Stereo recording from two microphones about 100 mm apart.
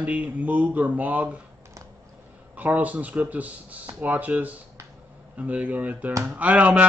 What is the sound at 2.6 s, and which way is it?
A man's voice, 15° right (ahead or behind).